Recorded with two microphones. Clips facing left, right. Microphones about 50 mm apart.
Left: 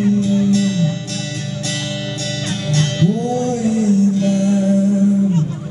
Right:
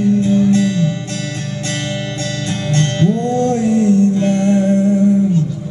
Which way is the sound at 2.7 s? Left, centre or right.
Right.